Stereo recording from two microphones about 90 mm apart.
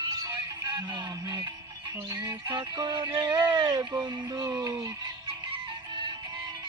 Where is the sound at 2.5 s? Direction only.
60° right (ahead or behind).